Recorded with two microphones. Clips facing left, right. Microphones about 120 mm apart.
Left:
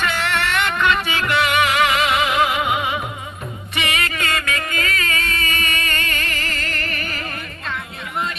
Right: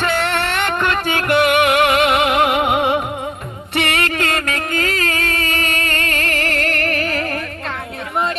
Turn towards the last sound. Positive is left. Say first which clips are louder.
# right 8 dB
turn(degrees=-70)  # may be behind; listen again after turning